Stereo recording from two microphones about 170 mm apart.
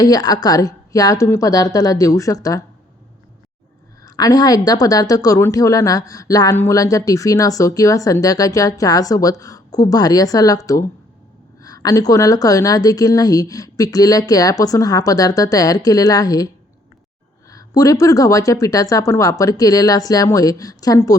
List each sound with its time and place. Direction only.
0.0 s a woman's voice: 20° left (ahead or behind)
4.0 s a woman's voice: 20° left (ahead or behind)
17.5 s a woman's voice: 20° left (ahead or behind)